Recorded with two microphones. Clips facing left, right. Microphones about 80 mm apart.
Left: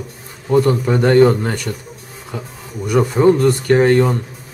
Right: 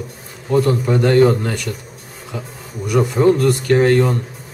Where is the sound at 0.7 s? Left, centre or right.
Left.